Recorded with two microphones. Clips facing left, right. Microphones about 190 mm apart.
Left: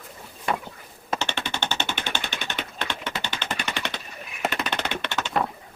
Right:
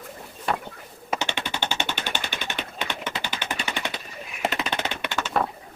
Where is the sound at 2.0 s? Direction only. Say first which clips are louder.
Even; 10° right (ahead or behind).